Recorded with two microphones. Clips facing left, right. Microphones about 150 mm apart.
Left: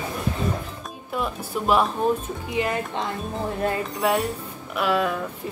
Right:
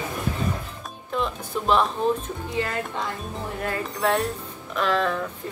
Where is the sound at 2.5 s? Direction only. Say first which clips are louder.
Left 3 dB; 20° left (ahead or behind).